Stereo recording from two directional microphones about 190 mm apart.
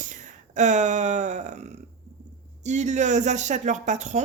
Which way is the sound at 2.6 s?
40° right (ahead or behind).